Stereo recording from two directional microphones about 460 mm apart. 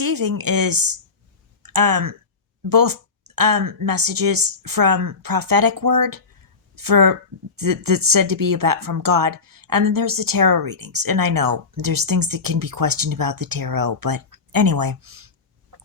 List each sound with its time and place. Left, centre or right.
0.0 s speech: right